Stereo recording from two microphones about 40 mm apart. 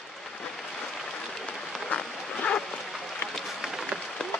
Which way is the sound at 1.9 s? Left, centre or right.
Left.